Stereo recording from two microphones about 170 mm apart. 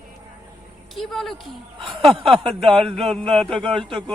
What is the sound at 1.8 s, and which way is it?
A man's voice, 30° right (ahead or behind).